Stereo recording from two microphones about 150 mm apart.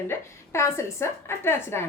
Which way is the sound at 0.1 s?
20° left (ahead or behind).